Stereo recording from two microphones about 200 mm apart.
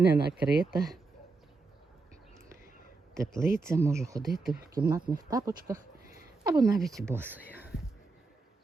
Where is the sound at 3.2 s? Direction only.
15° right (ahead or behind).